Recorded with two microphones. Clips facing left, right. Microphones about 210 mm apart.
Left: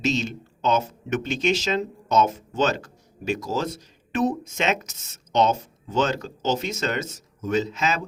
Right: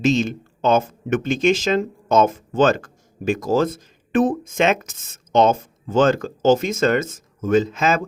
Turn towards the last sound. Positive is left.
turn(degrees=-50)  # may be behind; listen again after turning